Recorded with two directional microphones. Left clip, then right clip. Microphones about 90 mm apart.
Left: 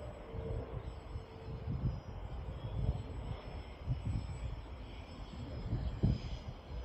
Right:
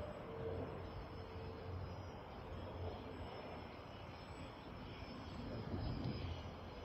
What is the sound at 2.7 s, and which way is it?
Vehicle, 40° left (ahead or behind).